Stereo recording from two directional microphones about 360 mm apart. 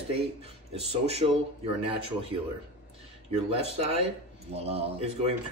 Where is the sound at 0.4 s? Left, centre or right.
Centre.